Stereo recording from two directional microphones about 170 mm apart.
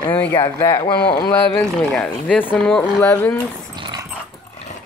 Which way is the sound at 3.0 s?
15° left (ahead or behind).